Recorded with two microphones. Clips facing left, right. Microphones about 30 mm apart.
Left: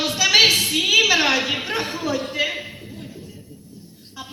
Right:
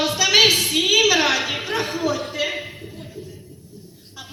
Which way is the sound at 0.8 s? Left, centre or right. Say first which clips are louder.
Even; left.